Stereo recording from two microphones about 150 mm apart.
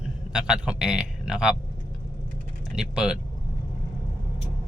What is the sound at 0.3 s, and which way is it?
A man's voice, 5° right (ahead or behind).